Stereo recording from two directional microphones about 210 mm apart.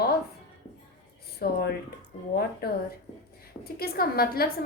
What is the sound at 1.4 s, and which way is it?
Speech, 45° left (ahead or behind).